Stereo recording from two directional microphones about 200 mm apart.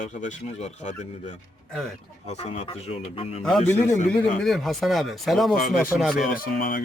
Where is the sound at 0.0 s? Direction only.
40° left (ahead or behind).